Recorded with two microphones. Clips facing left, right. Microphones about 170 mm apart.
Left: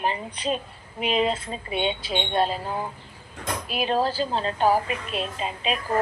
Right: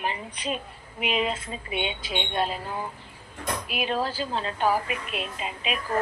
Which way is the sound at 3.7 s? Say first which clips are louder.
Left 5 dB; 35° left (ahead or behind).